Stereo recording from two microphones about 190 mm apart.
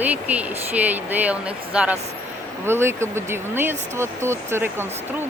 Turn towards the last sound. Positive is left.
turn(degrees=-10)  # may be behind; listen again after turning